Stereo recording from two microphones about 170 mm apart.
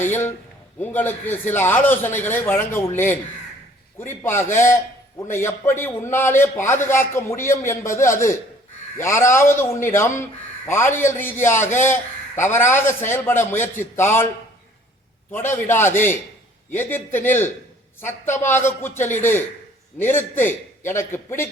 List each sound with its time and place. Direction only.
0.1 s a man's voice: 15° left (ahead or behind)
15.3 s a man's voice: 10° left (ahead or behind)